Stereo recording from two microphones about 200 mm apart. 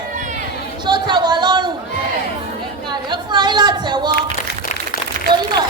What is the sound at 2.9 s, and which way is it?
A woman's voice, 20° right (ahead or behind).